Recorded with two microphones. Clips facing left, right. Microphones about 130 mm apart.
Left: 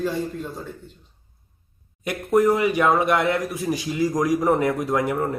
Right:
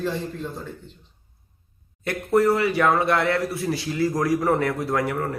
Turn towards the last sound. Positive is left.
turn(degrees=20)  # may be behind; listen again after turning